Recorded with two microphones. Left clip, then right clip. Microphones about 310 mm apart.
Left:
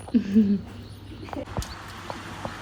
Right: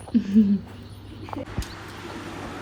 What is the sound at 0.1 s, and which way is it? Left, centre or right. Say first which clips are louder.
Speech: even; centre.